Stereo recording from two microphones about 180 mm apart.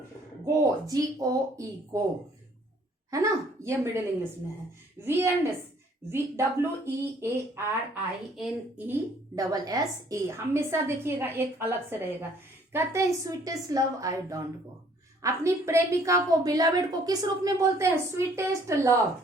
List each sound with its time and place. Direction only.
0.4 s speech: 20° right (ahead or behind)
3.1 s a woman's voice: 15° right (ahead or behind)
8.9 s a woman's voice: 20° right (ahead or behind)